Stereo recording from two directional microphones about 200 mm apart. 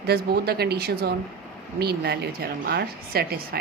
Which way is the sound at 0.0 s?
50° right (ahead or behind).